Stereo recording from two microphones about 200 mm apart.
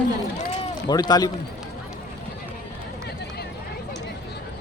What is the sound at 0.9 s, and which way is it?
Speech, 20° left (ahead or behind).